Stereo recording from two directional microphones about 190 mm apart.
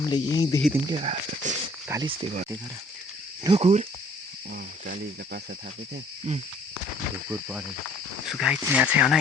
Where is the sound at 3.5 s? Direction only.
35° right (ahead or behind).